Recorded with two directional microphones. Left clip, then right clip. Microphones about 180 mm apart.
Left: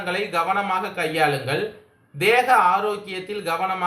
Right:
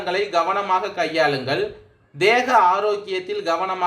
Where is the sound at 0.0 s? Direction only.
40° right (ahead or behind).